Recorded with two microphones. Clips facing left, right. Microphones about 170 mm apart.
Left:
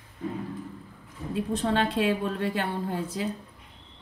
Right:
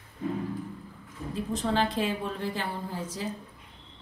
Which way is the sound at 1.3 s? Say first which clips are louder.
Left 2 dB; 65° left (ahead or behind).